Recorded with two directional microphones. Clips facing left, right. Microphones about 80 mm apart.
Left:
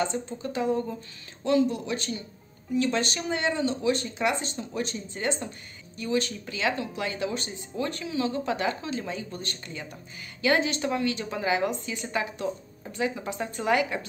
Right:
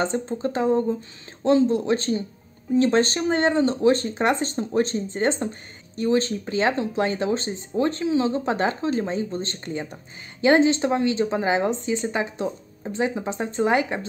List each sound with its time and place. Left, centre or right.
0.0 s a woman's voice: right